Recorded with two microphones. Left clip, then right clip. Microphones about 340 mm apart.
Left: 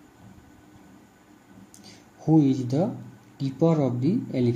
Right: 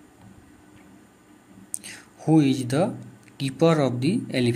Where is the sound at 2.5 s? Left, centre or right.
Right.